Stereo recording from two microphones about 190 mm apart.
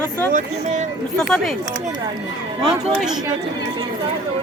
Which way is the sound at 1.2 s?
Centre (ahead or behind).